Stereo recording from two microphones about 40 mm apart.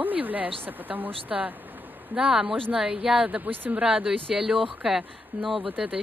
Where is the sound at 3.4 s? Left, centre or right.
Right.